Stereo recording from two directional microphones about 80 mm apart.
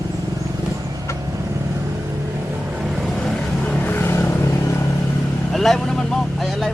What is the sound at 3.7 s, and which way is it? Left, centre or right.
Vehicle, left.